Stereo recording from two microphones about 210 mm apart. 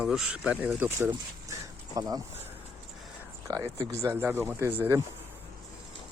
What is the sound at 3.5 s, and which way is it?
Speech, 15° right (ahead or behind).